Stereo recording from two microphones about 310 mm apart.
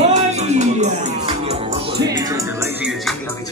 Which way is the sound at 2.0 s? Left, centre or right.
Centre.